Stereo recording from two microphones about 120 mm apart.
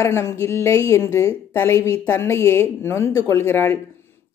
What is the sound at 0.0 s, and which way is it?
A woman's voice, 25° left (ahead or behind).